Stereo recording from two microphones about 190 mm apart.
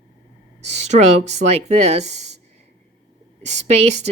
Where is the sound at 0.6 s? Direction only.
35° right (ahead or behind).